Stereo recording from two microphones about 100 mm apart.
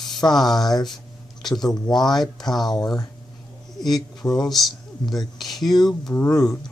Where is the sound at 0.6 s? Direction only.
40° left (ahead or behind).